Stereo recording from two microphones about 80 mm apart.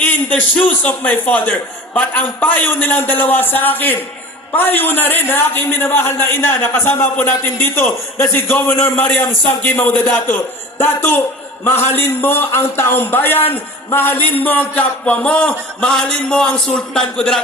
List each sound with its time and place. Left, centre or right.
0.0 s a man's voice: left